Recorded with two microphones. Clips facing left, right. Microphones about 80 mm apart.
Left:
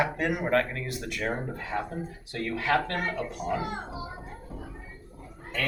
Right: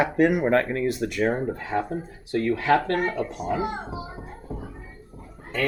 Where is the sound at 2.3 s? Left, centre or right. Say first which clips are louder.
Right 6 dB; right.